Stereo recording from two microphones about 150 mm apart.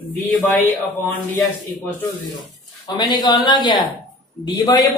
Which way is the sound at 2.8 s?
25° left (ahead or behind).